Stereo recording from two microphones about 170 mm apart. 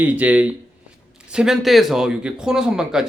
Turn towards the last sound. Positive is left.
turn(degrees=-5)  # may be behind; listen again after turning